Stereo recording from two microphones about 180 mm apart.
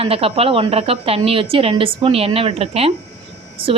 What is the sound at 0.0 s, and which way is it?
A woman's voice, 30° right (ahead or behind).